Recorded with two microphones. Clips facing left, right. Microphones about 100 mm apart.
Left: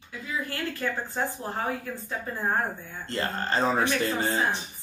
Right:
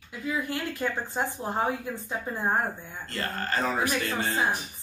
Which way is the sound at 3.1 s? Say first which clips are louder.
Left 3 dB; 25° left (ahead or behind).